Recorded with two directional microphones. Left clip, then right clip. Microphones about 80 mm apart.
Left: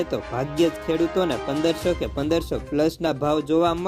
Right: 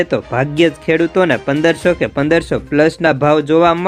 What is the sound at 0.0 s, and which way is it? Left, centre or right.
Speech, left.